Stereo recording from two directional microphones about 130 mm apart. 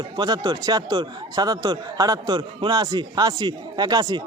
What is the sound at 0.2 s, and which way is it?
Speech, 30° right (ahead or behind).